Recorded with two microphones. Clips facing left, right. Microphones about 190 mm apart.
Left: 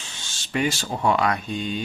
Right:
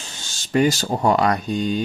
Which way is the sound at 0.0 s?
40° right (ahead or behind).